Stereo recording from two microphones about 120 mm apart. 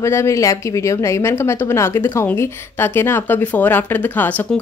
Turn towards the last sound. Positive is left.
turn(degrees=15)  # may be behind; listen again after turning